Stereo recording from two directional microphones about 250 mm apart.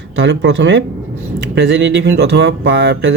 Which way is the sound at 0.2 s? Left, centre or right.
Right.